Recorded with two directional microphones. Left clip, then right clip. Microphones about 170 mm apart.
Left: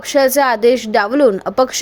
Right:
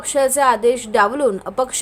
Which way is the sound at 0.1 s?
25° left (ahead or behind).